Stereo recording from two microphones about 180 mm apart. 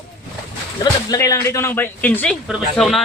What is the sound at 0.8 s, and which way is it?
Speech, 20° left (ahead or behind).